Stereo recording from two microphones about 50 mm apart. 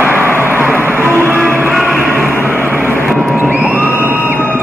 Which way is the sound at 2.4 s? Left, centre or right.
Right.